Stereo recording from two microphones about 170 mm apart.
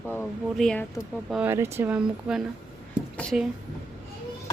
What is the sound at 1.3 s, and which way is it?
Speech, 10° right (ahead or behind).